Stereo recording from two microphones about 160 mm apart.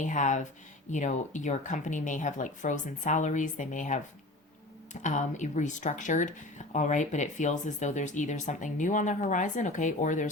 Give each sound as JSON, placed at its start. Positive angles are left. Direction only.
{"t": 0.0, "sound": "speech", "side_deg": 50}
{"t": 5.0, "sound": "speech", "side_deg": 50}